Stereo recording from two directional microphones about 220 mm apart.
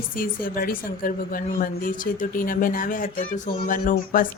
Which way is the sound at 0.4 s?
40° left (ahead or behind).